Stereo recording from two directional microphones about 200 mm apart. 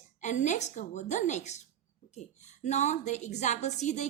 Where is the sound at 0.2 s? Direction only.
35° left (ahead or behind).